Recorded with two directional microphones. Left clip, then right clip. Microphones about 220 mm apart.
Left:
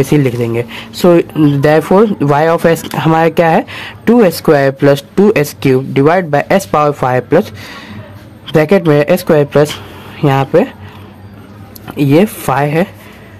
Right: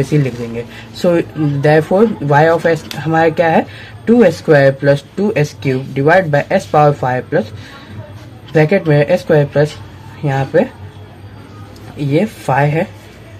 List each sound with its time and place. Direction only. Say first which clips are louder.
0.1 s speech: left 6 dB; 40° left (ahead or behind)
8.5 s speech: left 3 dB; 45° left (ahead or behind)
12.0 s speech: left 6 dB; 40° left (ahead or behind)